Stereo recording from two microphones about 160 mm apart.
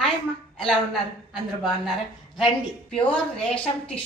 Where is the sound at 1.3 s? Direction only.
Centre (ahead or behind).